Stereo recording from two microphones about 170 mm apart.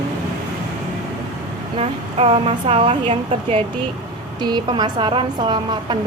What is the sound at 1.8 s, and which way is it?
A woman's voice, 35° right (ahead or behind).